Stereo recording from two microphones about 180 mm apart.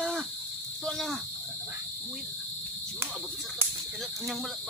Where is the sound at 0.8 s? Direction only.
Centre (ahead or behind).